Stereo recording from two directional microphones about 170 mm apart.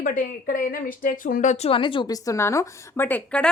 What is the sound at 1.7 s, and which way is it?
A woman's voice, 30° left (ahead or behind).